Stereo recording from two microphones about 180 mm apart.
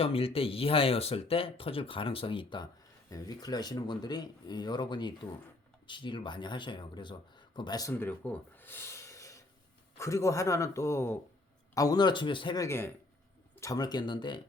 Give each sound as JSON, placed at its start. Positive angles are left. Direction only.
{"t": 0.0, "sound": "a man's voice", "side_deg": 35}
{"t": 12.6, "sound": "a man's voice", "side_deg": 15}